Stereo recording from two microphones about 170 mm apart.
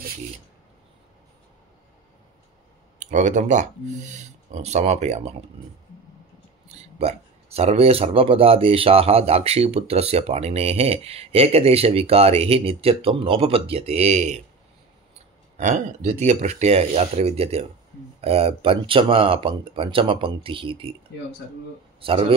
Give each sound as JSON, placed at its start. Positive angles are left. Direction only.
{"t": 3.0, "sound": "speech", "side_deg": -45}
{"t": 6.7, "sound": "speech", "side_deg": -40}
{"t": 15.5, "sound": "a sound", "side_deg": -45}
{"t": 16.1, "sound": "speech", "side_deg": -40}